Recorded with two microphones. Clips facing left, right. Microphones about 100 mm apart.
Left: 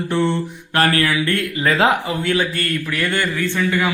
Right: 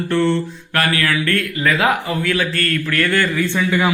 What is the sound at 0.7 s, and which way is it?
Mantra, 35° left (ahead or behind).